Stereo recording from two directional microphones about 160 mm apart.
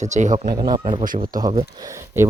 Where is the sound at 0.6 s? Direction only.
30° right (ahead or behind).